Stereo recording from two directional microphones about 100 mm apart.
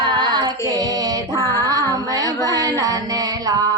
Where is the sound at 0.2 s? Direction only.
45° right (ahead or behind).